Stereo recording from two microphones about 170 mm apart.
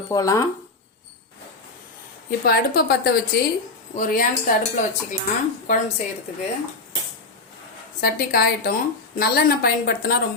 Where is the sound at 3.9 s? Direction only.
50° left (ahead or behind).